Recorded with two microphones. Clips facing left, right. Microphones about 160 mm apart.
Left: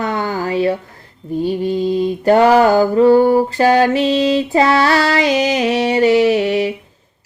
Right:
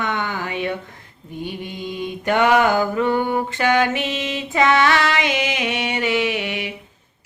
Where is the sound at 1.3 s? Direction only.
35° left (ahead or behind).